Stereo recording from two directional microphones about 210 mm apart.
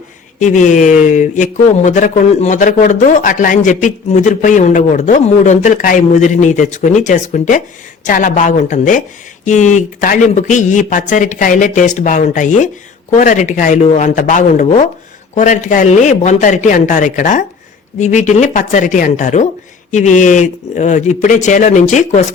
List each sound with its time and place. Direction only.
0.3 s speech: 35° left (ahead or behind)